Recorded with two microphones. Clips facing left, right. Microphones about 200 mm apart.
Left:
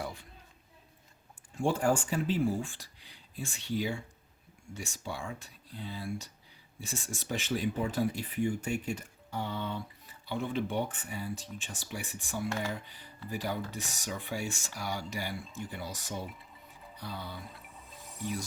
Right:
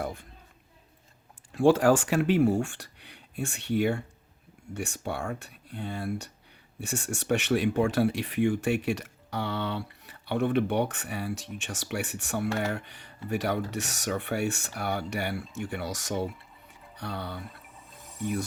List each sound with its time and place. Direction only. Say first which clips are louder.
0.0 s a sound: right 5 dB; 55° right (ahead or behind)
1.5 s speech: right 8 dB; 90° right
17.0 s speech: right 6 dB; 65° right (ahead or behind)